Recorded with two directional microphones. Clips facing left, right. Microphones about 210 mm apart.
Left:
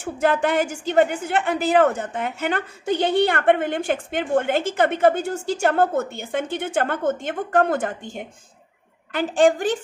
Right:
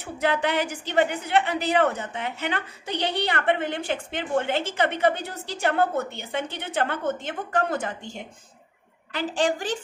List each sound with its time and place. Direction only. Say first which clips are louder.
0.0 s a woman's voice: left 4 dB; 50° left (ahead or behind)